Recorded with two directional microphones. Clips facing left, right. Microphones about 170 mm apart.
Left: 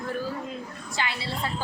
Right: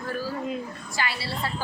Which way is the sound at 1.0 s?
20° left (ahead or behind).